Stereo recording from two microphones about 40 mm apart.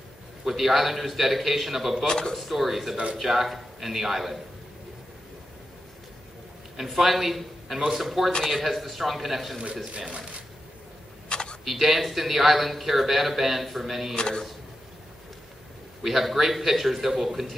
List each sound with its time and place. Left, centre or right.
0.5 s speech: centre
2.0 s speech: centre
2.3 s speech: centre
6.8 s a man's voice: centre
9.9 s speech: right
11.2 s a sound: left
11.6 s speech: centre
14.1 s speech: centre
16.0 s speech: centre